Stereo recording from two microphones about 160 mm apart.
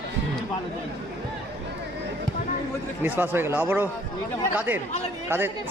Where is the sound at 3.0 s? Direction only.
15° right (ahead or behind).